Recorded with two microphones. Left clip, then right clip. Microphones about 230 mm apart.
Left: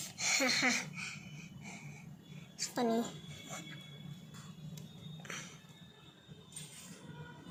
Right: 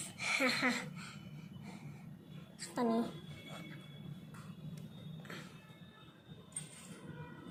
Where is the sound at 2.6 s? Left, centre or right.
Centre.